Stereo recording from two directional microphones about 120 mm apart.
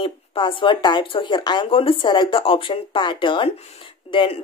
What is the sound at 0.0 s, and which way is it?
Speech, 45° left (ahead or behind).